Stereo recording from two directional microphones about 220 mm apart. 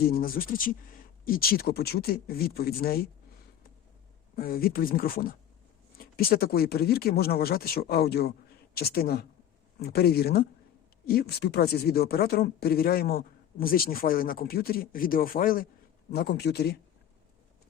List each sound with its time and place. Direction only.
0.0 s speech: 40° left (ahead or behind)
4.4 s speech: 40° left (ahead or behind)